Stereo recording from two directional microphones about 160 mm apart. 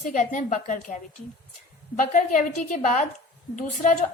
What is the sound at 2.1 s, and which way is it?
A woman's voice, 55° left (ahead or behind).